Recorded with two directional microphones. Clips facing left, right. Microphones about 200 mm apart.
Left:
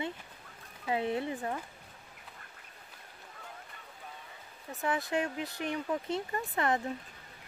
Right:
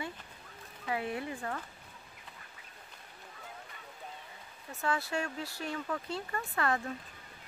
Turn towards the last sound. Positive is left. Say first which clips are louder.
# left 2 dB
turn(degrees=20)  # may be behind; listen again after turning